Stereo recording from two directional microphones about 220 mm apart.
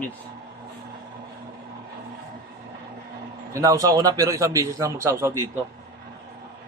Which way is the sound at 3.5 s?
15° right (ahead or behind).